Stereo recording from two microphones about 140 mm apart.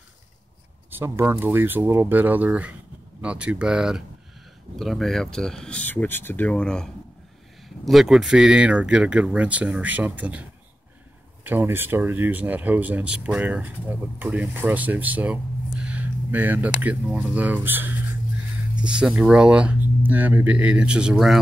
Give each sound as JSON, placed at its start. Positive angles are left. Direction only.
{"t": 0.8, "sound": "speech", "side_deg": -15}
{"t": 11.4, "sound": "speech", "side_deg": -15}